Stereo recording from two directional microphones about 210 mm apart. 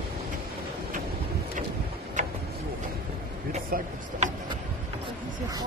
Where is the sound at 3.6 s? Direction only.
40° right (ahead or behind).